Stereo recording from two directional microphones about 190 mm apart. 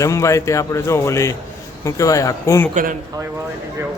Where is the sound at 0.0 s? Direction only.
15° left (ahead or behind).